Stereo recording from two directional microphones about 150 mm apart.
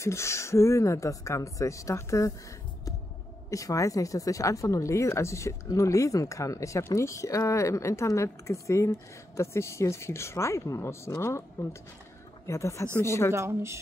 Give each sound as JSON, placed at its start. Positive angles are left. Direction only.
{"t": 0.0, "sound": "speech", "side_deg": 20}
{"t": 3.4, "sound": "speech", "side_deg": 20}
{"t": 12.4, "sound": "speech", "side_deg": 20}
{"t": 13.3, "sound": "speech", "side_deg": -20}